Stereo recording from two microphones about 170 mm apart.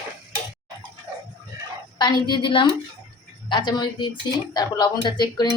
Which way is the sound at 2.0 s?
30° left (ahead or behind).